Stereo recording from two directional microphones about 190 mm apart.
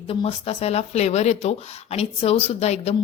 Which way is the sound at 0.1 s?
30° left (ahead or behind).